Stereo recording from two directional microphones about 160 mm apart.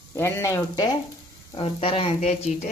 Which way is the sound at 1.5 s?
35° left (ahead or behind).